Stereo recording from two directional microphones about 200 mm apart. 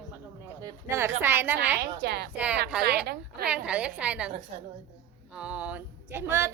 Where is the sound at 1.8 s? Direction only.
55° right (ahead or behind).